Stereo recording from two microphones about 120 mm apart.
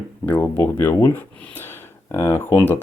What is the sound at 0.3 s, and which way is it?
Speech, 15° left (ahead or behind).